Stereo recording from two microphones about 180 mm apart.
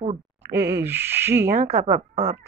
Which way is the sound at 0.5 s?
60° right (ahead or behind).